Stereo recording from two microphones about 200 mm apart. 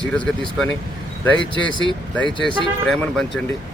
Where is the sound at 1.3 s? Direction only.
25° right (ahead or behind).